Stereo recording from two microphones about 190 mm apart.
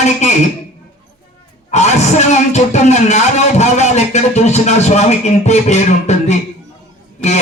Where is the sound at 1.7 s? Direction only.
35° left (ahead or behind).